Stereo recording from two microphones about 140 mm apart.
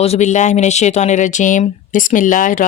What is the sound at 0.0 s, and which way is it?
Speech, 55° left (ahead or behind).